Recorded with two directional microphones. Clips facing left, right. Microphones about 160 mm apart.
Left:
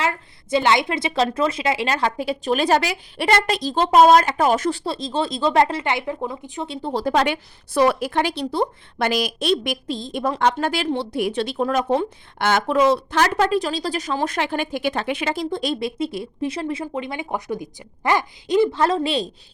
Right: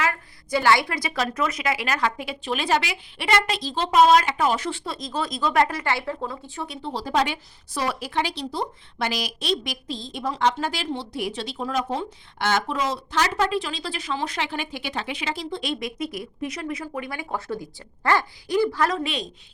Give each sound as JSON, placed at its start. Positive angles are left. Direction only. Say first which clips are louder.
{"t": 0.0, "sound": "a woman's voice", "louder": "left 2 dB", "side_deg": 25}
{"t": 6.8, "sound": "a woman's voice", "louder": "left 4 dB", "side_deg": 55}